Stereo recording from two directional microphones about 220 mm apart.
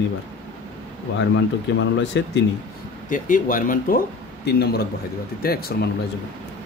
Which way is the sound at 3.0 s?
35° left (ahead or behind).